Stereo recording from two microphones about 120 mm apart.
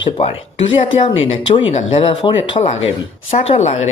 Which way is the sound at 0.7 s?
45° left (ahead or behind).